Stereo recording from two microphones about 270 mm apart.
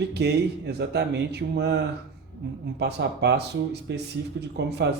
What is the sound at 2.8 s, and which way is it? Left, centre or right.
Speech, right.